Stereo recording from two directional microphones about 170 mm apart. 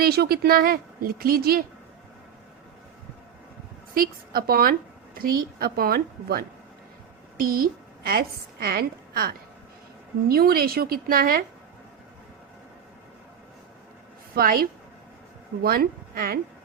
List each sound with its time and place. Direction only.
0.0 s speech: 65° right (ahead or behind)
3.9 s speech: 60° right (ahead or behind)
7.4 s a woman's voice: 60° right (ahead or behind)
14.3 s a woman's voice: 60° right (ahead or behind)